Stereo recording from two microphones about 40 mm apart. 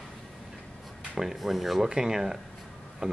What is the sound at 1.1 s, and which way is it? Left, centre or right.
Speech, centre.